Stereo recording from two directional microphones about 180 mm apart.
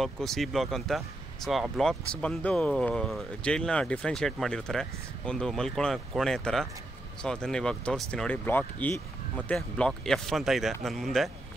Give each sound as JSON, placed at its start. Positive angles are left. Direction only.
{"t": 0.0, "sound": "speech", "side_deg": 0}